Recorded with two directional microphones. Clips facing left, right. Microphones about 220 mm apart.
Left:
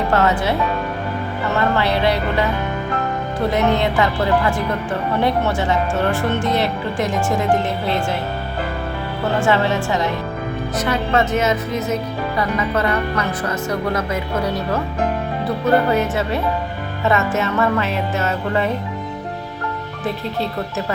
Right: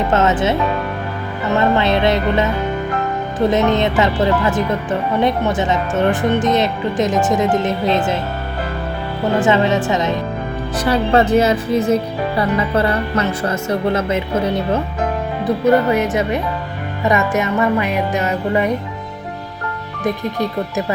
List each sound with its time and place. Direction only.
0.1 s speech: 20° right (ahead or behind)
1.7 s speech: 20° right (ahead or behind)
3.5 s speech: 20° right (ahead or behind)
9.4 s speech: 20° right (ahead or behind)
10.8 s a woman's voice: 35° right (ahead or behind)
15.4 s music: 15° right (ahead or behind)
20.1 s music: 15° right (ahead or behind)